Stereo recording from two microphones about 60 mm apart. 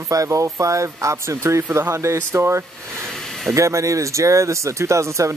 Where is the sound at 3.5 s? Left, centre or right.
Right.